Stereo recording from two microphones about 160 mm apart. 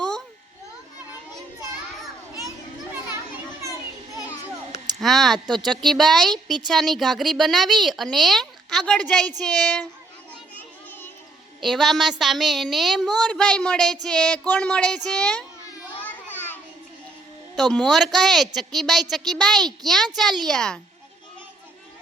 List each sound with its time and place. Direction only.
4.9 s a woman's voice: centre (ahead or behind)
10.5 s children playing: 10° left (ahead or behind)
11.6 s a woman's voice: centre (ahead or behind)
16.0 s a sound: 10° left (ahead or behind)
17.5 s a woman's voice: centre (ahead or behind)